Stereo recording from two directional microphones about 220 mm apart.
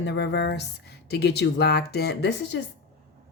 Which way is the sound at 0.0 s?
50° left (ahead or behind).